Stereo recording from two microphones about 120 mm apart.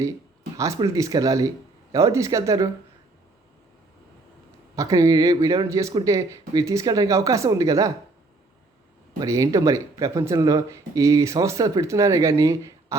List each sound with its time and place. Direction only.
0.5 s speech: 25° right (ahead or behind)
4.7 s speech: 25° right (ahead or behind)
9.2 s speech: 25° right (ahead or behind)